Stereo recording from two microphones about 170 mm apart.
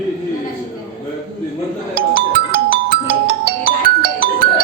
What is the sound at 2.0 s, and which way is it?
Music, 65° right (ahead or behind).